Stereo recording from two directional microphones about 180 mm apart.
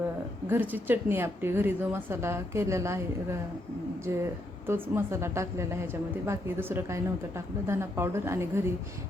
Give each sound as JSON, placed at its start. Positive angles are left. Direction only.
{"t": 0.4, "sound": "a woman's voice", "side_deg": -10}